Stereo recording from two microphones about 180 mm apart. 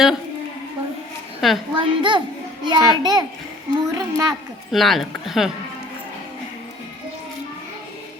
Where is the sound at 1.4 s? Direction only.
Centre (ahead or behind).